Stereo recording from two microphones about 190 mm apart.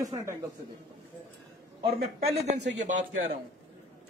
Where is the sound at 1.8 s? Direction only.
30° right (ahead or behind).